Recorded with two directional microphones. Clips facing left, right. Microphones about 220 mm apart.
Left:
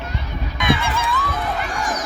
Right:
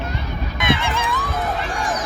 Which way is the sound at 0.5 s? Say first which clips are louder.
Left 1 dB; 15° right (ahead or behind).